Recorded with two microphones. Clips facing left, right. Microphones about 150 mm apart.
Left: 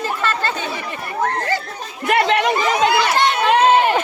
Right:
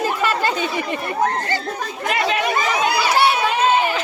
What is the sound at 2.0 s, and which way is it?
Speech, 65° left (ahead or behind).